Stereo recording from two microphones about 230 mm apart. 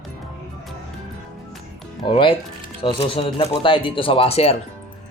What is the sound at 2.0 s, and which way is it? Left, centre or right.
Speech, left.